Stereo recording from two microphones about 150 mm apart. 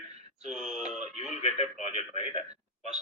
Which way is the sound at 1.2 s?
50° left (ahead or behind).